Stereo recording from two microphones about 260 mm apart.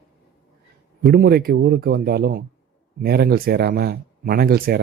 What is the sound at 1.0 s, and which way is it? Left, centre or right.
Speech, right.